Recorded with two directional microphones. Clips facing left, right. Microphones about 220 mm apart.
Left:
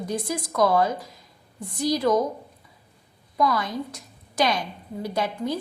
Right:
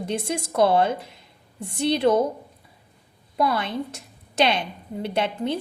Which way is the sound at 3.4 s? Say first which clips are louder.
Even; 25° right (ahead or behind).